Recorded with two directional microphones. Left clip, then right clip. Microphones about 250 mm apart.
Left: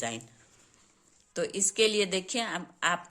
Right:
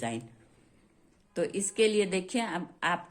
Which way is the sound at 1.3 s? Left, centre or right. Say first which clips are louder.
Left 1 dB; left.